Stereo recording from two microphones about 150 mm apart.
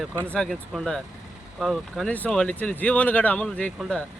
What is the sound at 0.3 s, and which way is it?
Speech, 5° left (ahead or behind).